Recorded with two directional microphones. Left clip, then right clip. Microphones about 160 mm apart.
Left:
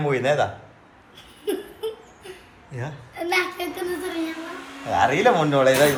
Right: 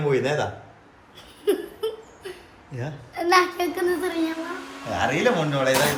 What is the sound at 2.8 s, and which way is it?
Speech, 15° right (ahead or behind).